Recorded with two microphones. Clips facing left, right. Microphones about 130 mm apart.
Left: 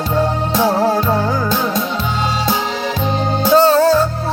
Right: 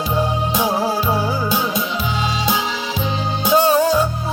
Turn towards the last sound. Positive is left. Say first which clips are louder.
# left 4 dB
turn(degrees=-15)  # may be behind; listen again after turning